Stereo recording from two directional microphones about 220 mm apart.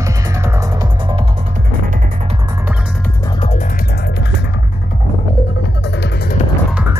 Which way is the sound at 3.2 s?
20° left (ahead or behind).